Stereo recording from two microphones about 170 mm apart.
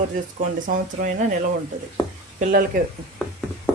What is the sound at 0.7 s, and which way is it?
Speech, 50° right (ahead or behind).